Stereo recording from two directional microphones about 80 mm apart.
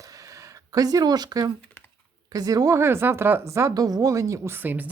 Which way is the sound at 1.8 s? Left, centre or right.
Left.